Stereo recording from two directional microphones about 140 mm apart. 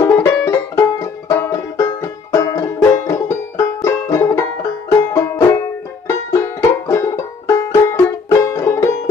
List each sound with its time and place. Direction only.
0.0 s music: 20° left (ahead or behind)